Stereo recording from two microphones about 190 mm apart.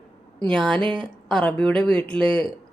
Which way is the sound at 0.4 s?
5° left (ahead or behind).